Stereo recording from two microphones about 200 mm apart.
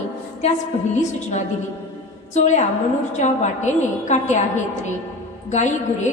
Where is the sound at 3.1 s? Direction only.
35° left (ahead or behind).